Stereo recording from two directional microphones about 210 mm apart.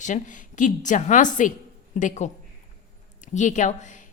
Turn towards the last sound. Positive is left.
turn(degrees=35)  # may be behind; listen again after turning